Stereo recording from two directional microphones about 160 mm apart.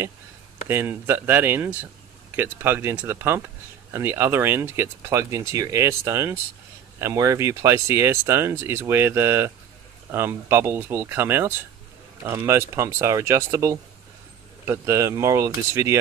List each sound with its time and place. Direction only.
0.7 s speech: 15° right (ahead or behind)